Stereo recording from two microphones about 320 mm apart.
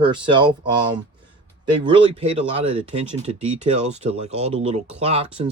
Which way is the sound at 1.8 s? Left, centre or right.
Centre.